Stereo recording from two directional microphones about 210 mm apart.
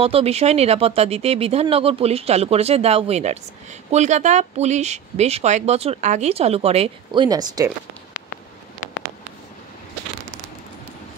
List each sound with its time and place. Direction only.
0.0 s speech: 30° right (ahead or behind)